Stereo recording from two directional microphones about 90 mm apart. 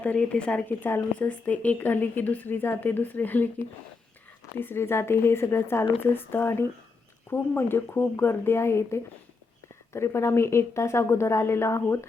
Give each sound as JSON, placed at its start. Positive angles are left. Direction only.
{"t": 0.0, "sound": "speech", "side_deg": 15}
{"t": 0.8, "sound": "a woman's voice", "side_deg": 25}